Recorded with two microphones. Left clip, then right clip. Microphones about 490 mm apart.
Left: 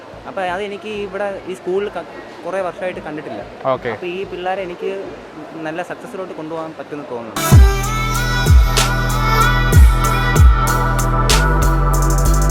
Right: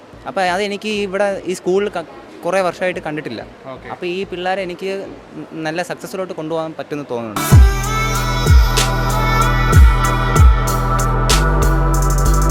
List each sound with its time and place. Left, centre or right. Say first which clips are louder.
0.3 s speech: right 4 dB; right
3.7 s speech: left 18 dB; left
4.0 s speech: right 2 dB; right
7.3 s music: left 3 dB; centre